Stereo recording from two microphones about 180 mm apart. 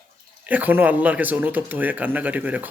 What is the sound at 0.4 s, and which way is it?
Speech, 10° right (ahead or behind).